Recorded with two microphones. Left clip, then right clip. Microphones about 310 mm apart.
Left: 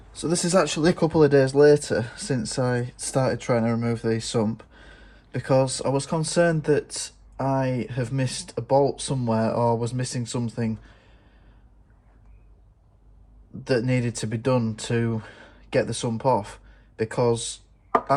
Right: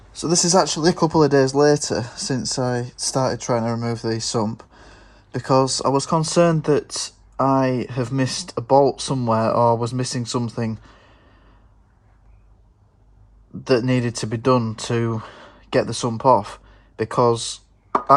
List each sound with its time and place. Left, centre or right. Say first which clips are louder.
0.1 s speech: right 5 dB; centre
13.7 s speech: right 5 dB; centre